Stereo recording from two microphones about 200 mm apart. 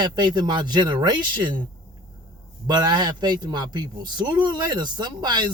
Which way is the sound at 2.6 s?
20° right (ahead or behind).